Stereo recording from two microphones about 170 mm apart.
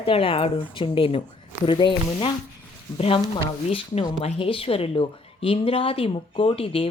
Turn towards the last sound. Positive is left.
turn(degrees=35)  # may be behind; listen again after turning